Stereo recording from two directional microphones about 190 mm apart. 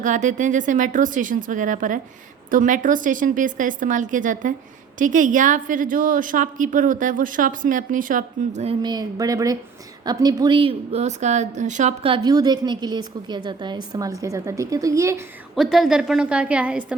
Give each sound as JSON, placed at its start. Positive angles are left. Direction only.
{"t": 0.0, "sound": "a woman's voice", "side_deg": -40}
{"t": 8.8, "sound": "a woman's voice", "side_deg": -20}
{"t": 15.5, "sound": "a woman's voice", "side_deg": 0}